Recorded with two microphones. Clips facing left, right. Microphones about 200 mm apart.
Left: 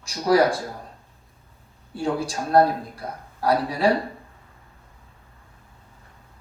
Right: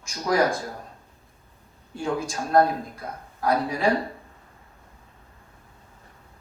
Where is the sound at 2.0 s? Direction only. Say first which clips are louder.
Left 2 dB; 35° left (ahead or behind).